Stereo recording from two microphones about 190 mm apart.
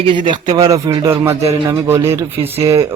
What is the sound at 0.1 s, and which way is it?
A man's voice, 25° right (ahead or behind).